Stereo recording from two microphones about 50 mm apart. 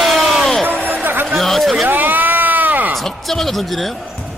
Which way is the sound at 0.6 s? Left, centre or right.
Right.